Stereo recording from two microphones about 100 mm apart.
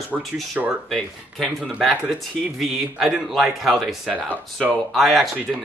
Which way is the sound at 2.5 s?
5° right (ahead or behind).